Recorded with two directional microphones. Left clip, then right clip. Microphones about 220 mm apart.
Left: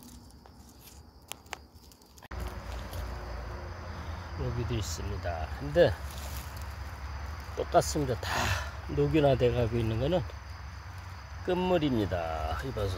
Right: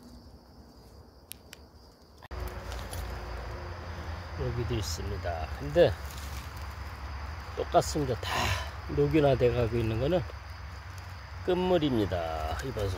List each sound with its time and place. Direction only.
4.6 s speech: centre (ahead or behind)
7.5 s speech: 10° left (ahead or behind)
11.4 s speech: centre (ahead or behind)